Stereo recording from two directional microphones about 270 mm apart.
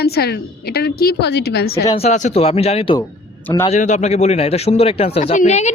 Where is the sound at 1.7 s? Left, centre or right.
Left.